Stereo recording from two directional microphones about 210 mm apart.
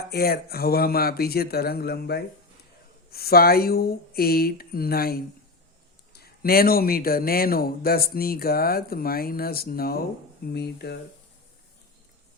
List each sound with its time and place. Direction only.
0.1 s a man's voice: 45° left (ahead or behind)